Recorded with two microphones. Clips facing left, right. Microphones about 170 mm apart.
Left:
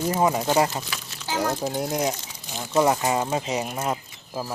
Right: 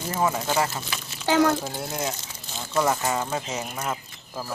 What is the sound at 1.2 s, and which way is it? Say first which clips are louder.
Speech: right 6 dB; 70° right (ahead or behind).